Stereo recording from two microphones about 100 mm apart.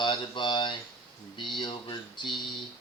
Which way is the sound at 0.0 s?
55° left (ahead or behind).